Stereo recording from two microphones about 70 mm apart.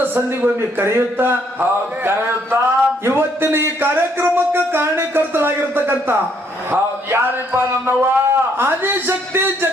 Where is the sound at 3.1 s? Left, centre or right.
Right.